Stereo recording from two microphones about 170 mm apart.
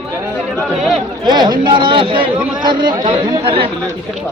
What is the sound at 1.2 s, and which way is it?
Speech, 25° right (ahead or behind).